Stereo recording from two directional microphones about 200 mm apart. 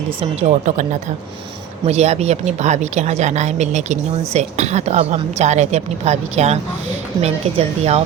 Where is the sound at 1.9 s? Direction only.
30° right (ahead or behind).